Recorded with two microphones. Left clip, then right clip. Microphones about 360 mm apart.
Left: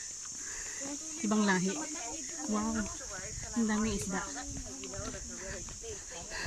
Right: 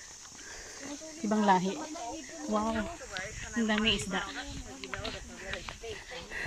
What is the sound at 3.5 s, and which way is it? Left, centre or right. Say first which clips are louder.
Speech: right 5 dB; centre.